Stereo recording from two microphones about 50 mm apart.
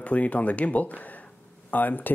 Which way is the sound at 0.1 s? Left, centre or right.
Left.